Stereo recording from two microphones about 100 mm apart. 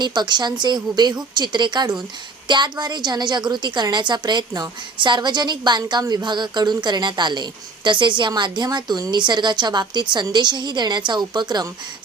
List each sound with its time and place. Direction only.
0.0 s a woman's voice: 50° right (ahead or behind)